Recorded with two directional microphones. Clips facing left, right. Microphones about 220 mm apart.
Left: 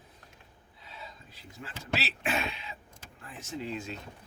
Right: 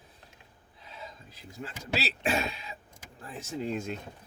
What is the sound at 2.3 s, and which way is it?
Speech, 40° right (ahead or behind).